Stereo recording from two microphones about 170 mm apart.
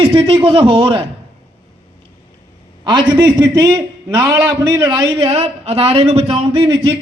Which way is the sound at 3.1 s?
25° right (ahead or behind).